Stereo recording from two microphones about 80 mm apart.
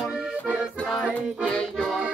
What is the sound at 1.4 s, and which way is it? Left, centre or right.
Music, centre.